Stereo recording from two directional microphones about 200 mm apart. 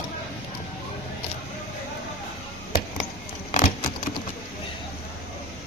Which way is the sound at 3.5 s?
35° left (ahead or behind).